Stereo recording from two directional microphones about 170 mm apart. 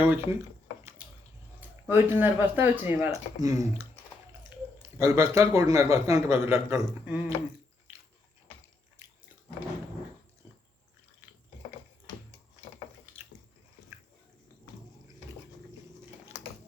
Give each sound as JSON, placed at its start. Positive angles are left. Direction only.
{"t": 0.0, "sound": "a man's voice", "side_deg": -15}
{"t": 1.9, "sound": "a man's voice", "side_deg": -10}
{"t": 4.5, "sound": "a sound", "side_deg": -10}
{"t": 4.9, "sound": "a man's voice", "side_deg": -15}